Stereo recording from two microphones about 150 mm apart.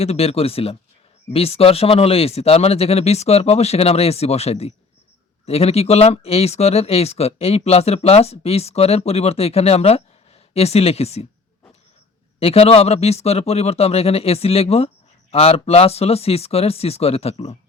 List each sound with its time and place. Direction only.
0.0 s speech: 45° left (ahead or behind)
12.4 s speech: 40° left (ahead or behind)